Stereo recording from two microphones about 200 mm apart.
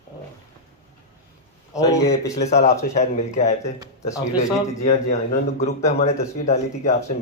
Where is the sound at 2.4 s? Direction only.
35° left (ahead or behind).